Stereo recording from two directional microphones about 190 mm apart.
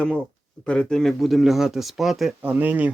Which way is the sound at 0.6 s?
5° left (ahead or behind).